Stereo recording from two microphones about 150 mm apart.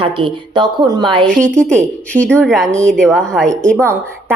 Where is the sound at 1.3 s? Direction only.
5° left (ahead or behind).